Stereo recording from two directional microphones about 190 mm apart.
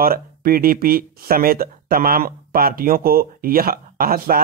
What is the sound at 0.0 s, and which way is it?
Speech, 50° right (ahead or behind).